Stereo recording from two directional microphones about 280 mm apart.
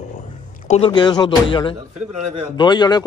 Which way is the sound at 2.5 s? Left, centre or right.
Centre.